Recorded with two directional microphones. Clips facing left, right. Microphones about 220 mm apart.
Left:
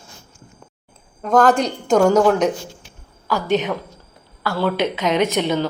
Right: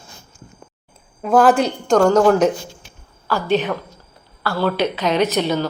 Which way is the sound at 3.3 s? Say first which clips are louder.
Right 1 dB; 20° left (ahead or behind).